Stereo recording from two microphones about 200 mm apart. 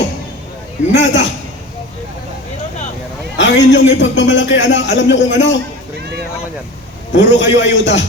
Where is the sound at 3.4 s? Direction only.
65° left (ahead or behind).